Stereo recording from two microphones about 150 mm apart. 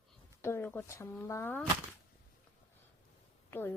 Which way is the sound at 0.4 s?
15° left (ahead or behind).